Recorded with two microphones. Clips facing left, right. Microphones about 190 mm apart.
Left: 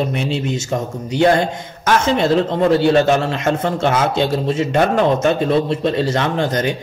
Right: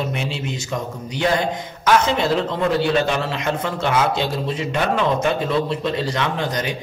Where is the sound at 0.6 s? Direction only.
45° left (ahead or behind).